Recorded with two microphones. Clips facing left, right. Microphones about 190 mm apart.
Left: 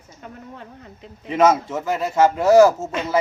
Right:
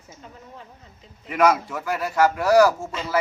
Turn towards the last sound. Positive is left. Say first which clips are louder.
# left 4 dB
turn(degrees=20)  # may be behind; listen again after turning